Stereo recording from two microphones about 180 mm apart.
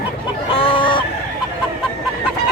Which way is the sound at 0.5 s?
30° left (ahead or behind).